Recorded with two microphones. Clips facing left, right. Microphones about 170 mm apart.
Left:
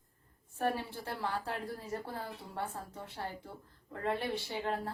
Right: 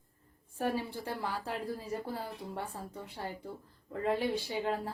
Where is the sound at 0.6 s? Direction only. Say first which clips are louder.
Right 1 dB; 15° right (ahead or behind).